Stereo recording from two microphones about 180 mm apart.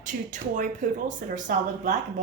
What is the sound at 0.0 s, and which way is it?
Speech, 45° right (ahead or behind).